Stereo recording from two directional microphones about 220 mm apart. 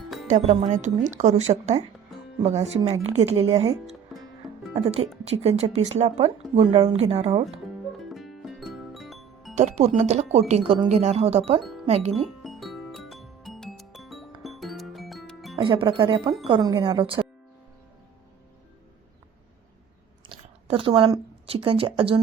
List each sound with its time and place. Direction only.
0.3 s speech: 30° right (ahead or behind)
3.5 s speech: 15° right (ahead or behind)
4.1 s music: centre (ahead or behind)
4.7 s speech: 30° right (ahead or behind)
7.9 s music: centre (ahead or behind)
9.6 s speech: 30° right (ahead or behind)
12.1 s music: centre (ahead or behind)
15.5 s speech: 25° right (ahead or behind)
20.2 s speech: 25° right (ahead or behind)